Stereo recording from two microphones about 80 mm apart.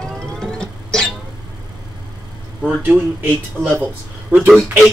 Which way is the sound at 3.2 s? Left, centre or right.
Right.